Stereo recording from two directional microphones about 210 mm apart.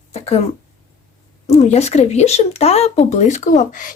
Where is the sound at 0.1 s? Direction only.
30° left (ahead or behind).